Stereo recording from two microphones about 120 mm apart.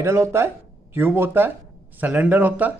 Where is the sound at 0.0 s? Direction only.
20° right (ahead or behind).